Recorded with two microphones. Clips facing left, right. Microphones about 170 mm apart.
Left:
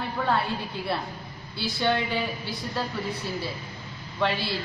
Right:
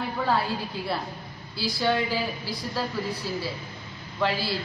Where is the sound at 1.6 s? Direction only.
5° right (ahead or behind).